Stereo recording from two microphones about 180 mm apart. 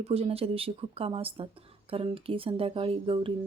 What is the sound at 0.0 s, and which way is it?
Speech, 35° right (ahead or behind).